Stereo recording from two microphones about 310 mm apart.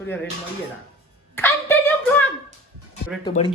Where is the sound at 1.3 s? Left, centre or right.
Centre.